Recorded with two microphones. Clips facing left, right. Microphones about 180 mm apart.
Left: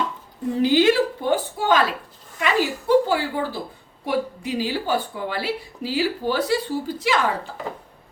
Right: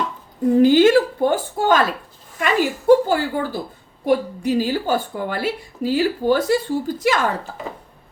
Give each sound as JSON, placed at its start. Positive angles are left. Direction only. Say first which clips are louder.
{"t": 0.5, "sound": "a woman's voice", "louder": "right 5 dB", "side_deg": -45}